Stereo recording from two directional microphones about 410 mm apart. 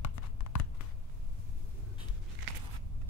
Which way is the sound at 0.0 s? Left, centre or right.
Left.